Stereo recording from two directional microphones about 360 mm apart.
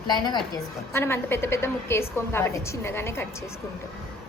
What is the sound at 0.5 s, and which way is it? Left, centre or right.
A woman's voice, centre.